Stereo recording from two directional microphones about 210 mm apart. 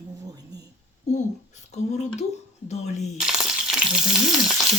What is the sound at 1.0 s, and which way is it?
Speech, 35° left (ahead or behind).